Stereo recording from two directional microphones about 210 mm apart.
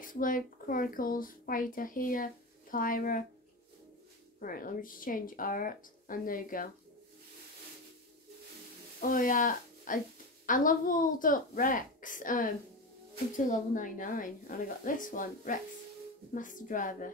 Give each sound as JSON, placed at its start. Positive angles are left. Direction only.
{"t": 0.0, "sound": "speech", "side_deg": 40}
{"t": 4.4, "sound": "speech", "side_deg": 40}
{"t": 9.0, "sound": "speech", "side_deg": 40}